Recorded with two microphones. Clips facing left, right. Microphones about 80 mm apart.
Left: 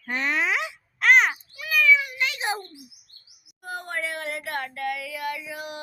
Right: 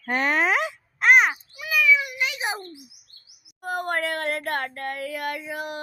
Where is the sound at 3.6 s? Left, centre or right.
Right.